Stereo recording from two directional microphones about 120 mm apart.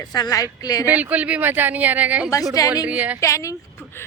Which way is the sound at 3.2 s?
25° left (ahead or behind).